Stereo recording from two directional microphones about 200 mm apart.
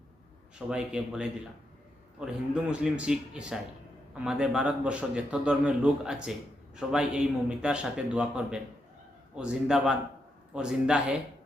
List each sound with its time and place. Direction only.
0.7 s a man's voice: 5° right (ahead or behind)